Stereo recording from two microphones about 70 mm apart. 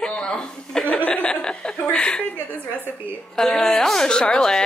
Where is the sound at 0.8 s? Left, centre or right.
Left.